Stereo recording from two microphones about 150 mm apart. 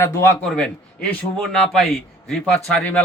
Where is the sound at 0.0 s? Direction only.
15° left (ahead or behind).